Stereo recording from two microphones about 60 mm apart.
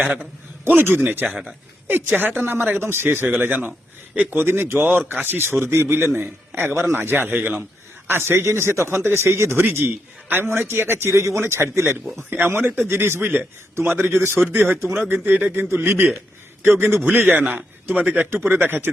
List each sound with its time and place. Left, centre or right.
0.7 s a man's voice: right
4.4 s a man's voice: right
9.6 s a man's voice: right
12.3 s a man's voice: right